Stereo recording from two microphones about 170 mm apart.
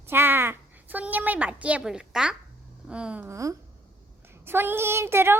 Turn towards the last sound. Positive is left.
turn(degrees=-15)  # may be behind; listen again after turning